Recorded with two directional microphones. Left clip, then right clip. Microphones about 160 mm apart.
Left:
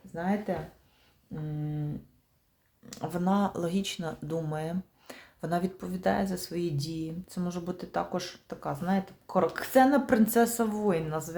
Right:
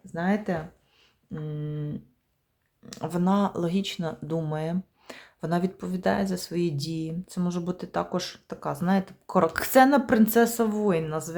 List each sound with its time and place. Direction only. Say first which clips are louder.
0.1 s speech: right 4 dB; 25° right (ahead or behind)
1.4 s a sound: right 2 dB; 45° right (ahead or behind)
2.9 s speech: right 3 dB; 25° right (ahead or behind); by 10.0 s 40° right (ahead or behind)
10.1 s speech: right 3 dB; 25° right (ahead or behind)